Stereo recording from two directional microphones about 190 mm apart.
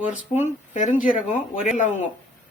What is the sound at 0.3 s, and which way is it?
Speech, 30° left (ahead or behind).